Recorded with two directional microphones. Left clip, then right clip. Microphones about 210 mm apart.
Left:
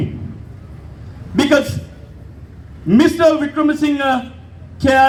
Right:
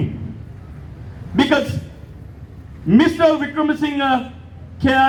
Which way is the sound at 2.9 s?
35° left (ahead or behind).